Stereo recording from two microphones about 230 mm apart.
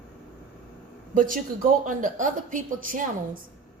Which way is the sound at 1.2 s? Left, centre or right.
Right.